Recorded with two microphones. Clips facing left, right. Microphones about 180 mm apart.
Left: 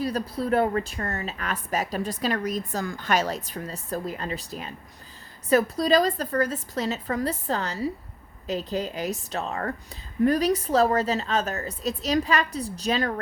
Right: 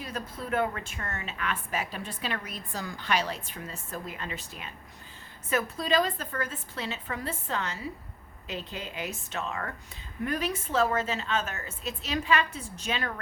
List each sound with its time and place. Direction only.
0.0 s a woman's voice: 35° left (ahead or behind)